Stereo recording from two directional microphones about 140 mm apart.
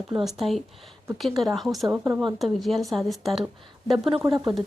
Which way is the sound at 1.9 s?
15° right (ahead or behind).